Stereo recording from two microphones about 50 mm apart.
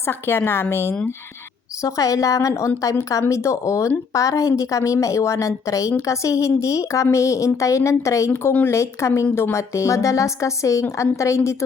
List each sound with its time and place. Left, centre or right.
0.0 s a woman's voice: left
1.8 s a woman's voice: left
8.6 s speech: left
9.3 s a woman's voice: left